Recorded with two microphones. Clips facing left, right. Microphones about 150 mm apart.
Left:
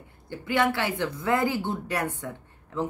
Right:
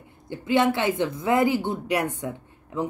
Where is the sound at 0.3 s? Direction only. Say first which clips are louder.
Right 4 dB; 20° right (ahead or behind).